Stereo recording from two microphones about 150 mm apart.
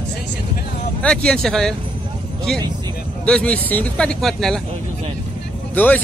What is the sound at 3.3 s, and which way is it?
Speech, 10° left (ahead or behind).